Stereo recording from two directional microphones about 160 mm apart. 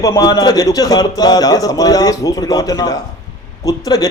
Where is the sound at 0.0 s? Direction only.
20° left (ahead or behind).